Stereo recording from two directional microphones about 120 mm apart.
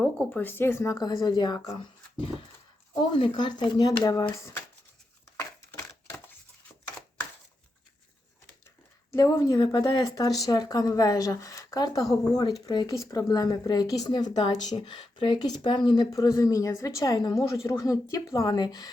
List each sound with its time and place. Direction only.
0.0 s a sound: 5° left (ahead or behind)
0.3 s a woman's voice: 15° left (ahead or behind); by 1.7 s 35° left (ahead or behind)
3.0 s speech: 40° left (ahead or behind); by 4.6 s 25° left (ahead or behind)
5.4 s crushing: 20° left (ahead or behind)
9.3 s a woman's voice: 25° left (ahead or behind)
9.6 s speech: 35° left (ahead or behind)
16.1 s a woman's voice: 25° left (ahead or behind)